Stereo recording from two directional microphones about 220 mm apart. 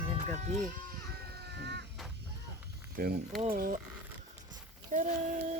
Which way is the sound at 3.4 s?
40° right (ahead or behind).